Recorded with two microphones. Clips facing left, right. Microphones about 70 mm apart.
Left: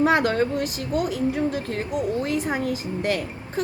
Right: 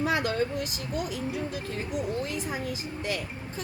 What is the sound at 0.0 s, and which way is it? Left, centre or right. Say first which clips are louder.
Speech: left 7 dB; left.